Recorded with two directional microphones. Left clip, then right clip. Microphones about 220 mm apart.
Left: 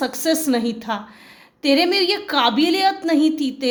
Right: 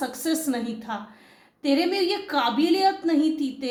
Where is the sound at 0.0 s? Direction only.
45° left (ahead or behind).